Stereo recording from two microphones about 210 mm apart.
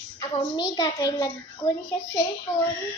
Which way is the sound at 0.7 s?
20° left (ahead or behind).